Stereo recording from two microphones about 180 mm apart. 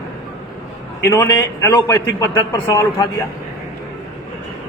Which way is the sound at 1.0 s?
15° left (ahead or behind).